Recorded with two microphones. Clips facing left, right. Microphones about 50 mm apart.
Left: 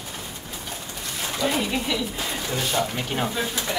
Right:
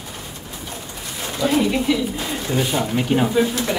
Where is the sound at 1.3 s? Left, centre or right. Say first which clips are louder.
Right 6 dB; centre.